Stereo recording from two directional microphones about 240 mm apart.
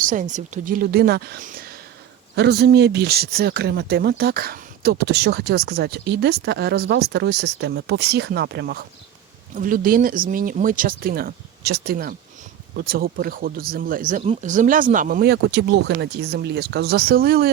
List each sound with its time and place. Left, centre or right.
0.0 s speech: right